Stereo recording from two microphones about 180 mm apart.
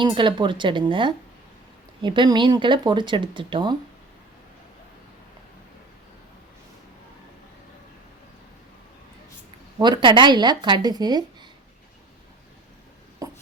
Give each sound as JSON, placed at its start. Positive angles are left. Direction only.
{"t": 0.0, "sound": "speech", "side_deg": -25}
{"t": 9.7, "sound": "speech", "side_deg": -25}
{"t": 13.2, "sound": "a sound", "side_deg": -20}